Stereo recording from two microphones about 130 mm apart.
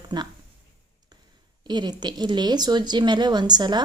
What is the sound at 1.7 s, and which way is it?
A woman's voice, 35° right (ahead or behind).